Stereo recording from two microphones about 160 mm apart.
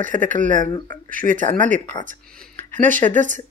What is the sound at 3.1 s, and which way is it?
Speech, 55° right (ahead or behind).